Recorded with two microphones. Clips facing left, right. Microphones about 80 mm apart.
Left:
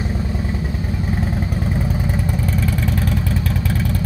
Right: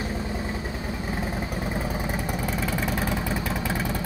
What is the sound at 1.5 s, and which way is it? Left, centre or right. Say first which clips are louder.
Vehicle: left 5 dB; centre.